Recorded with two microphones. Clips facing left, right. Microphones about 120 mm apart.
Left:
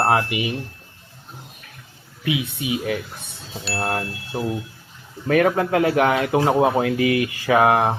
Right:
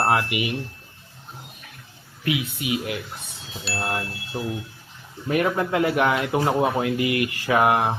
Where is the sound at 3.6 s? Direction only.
Centre (ahead or behind).